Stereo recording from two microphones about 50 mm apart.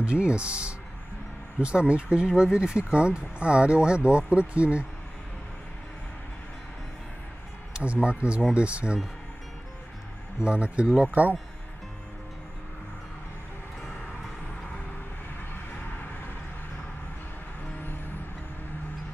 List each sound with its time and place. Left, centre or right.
0.0 s speech: right
7.7 s speech: right
10.4 s speech: right